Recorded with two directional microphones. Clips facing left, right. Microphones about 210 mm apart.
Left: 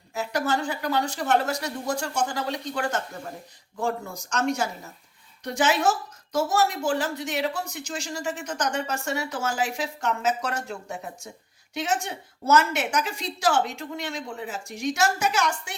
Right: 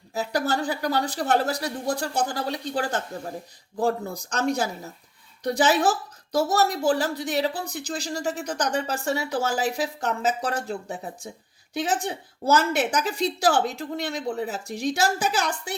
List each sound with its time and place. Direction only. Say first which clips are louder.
0.1 s a woman's voice: right 1 dB; 35° right (ahead or behind)